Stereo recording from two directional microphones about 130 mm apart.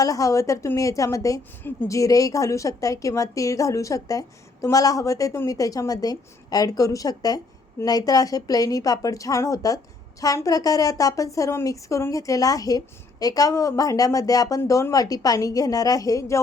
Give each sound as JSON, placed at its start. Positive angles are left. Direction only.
{"t": 0.0, "sound": "a woman's voice", "side_deg": 25}